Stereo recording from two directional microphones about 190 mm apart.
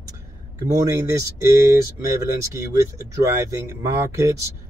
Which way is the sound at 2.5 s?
15° right (ahead or behind).